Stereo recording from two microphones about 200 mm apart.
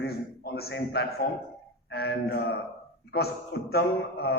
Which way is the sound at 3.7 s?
55° left (ahead or behind).